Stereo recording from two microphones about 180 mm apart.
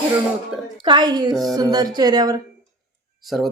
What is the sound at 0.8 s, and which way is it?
Speech, 25° right (ahead or behind).